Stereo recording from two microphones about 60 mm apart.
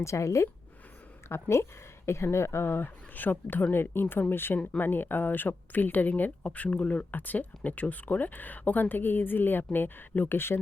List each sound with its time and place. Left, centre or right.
0.0 s speech: left